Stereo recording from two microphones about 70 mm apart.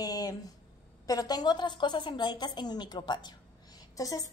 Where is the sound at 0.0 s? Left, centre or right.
Left.